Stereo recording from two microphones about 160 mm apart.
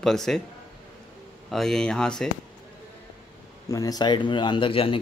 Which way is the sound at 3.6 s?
20° left (ahead or behind).